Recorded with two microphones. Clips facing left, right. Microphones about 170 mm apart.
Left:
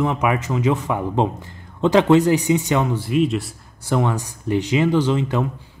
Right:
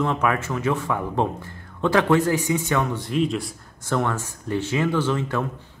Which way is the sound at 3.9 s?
15° left (ahead or behind).